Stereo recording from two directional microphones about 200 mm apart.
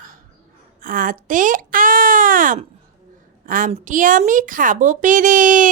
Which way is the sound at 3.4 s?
40° right (ahead or behind).